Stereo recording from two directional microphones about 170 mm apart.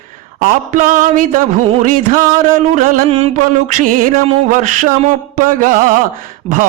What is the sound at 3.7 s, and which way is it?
Mantra, 50° right (ahead or behind).